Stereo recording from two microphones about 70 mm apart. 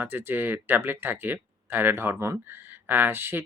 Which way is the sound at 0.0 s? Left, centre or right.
Right.